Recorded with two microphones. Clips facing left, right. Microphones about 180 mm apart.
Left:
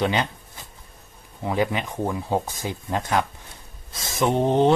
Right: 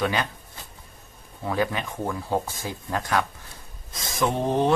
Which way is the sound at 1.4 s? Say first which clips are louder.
Left 2 dB; 20° left (ahead or behind).